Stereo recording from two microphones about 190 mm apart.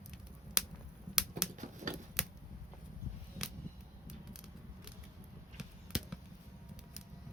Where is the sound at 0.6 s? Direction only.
5° right (ahead or behind).